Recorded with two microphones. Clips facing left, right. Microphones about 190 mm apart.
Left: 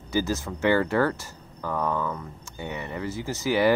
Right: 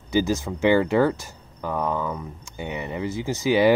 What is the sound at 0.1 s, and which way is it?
Speech, 15° right (ahead or behind).